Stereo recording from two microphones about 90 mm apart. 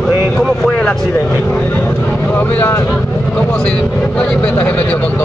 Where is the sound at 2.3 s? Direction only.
20° left (ahead or behind).